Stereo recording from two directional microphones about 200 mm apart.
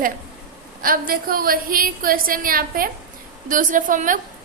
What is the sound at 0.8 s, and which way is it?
A woman's voice, 45° right (ahead or behind).